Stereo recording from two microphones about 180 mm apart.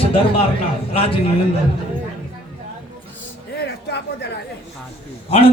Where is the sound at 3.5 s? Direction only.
60° left (ahead or behind).